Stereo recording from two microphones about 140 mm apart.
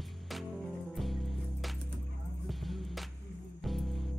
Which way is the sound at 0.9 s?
Centre (ahead or behind).